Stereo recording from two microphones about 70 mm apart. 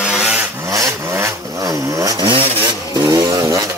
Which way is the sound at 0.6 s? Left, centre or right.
Right.